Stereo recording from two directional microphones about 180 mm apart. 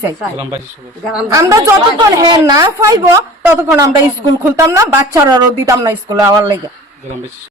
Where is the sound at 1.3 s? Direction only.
15° right (ahead or behind).